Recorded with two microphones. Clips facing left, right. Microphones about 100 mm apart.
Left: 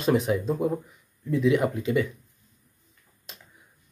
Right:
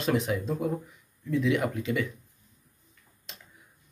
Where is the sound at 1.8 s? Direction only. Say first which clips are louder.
Left 4 dB; 30° left (ahead or behind).